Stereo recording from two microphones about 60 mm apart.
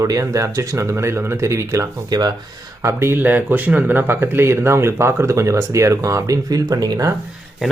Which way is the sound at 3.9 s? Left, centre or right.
Right.